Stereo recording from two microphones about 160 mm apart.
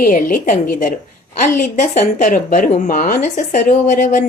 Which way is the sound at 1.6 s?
50° left (ahead or behind).